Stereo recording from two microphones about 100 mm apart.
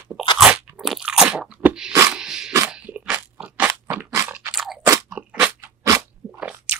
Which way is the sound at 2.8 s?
15° right (ahead or behind).